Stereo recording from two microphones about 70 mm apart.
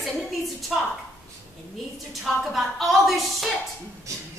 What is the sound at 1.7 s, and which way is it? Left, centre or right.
A woman's voice, centre.